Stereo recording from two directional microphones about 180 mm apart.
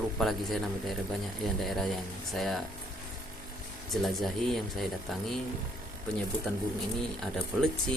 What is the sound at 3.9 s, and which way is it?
Speech, centre (ahead or behind).